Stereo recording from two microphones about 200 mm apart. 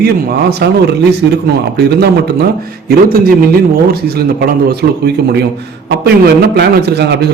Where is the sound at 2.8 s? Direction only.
50° right (ahead or behind).